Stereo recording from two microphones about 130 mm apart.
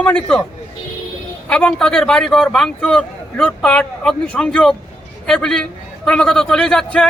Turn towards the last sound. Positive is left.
turn(degrees=5)  # may be behind; listen again after turning